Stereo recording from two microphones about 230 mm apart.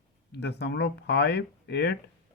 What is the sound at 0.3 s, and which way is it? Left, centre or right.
Speech, left.